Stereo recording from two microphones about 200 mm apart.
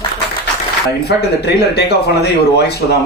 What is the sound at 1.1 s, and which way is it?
Speech, 55° left (ahead or behind).